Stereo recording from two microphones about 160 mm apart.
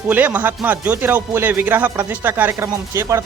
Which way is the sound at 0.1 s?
10° right (ahead or behind).